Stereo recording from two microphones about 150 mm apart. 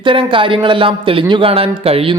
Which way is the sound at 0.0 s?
35° right (ahead or behind).